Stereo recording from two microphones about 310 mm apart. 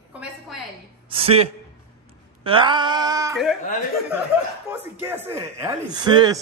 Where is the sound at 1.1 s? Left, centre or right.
Centre.